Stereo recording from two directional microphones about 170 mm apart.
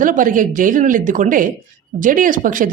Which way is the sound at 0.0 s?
50° right (ahead or behind).